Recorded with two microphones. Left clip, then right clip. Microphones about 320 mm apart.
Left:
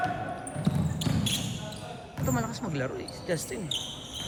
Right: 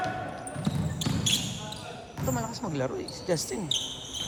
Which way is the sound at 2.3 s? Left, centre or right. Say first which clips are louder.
Left 1 dB; centre.